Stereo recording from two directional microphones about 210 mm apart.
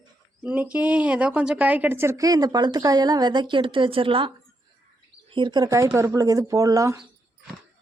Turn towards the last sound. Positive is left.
turn(degrees=-15)  # may be behind; listen again after turning